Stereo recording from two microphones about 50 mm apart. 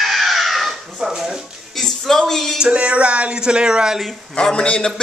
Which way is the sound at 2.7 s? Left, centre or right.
Right.